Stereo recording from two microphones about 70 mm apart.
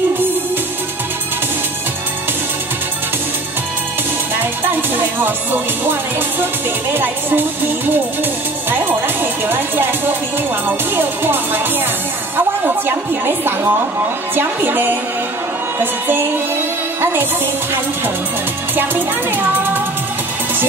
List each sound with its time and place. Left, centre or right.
4.4 s music: right
6.4 s a woman's voice: right
18.8 s speech: right